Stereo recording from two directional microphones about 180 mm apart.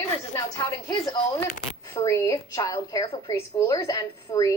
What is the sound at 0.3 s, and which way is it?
A woman's voice, 20° left (ahead or behind).